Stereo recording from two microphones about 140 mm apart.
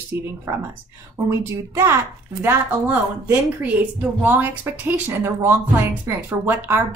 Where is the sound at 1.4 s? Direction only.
20° right (ahead or behind).